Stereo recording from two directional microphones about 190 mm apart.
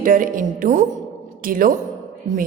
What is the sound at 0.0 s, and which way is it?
A woman's voice, 45° right (ahead or behind).